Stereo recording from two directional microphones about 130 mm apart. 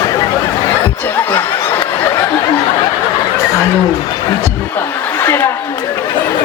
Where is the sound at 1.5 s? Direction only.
30° left (ahead or behind).